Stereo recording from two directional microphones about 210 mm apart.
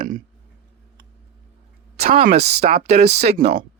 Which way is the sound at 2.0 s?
35° right (ahead or behind).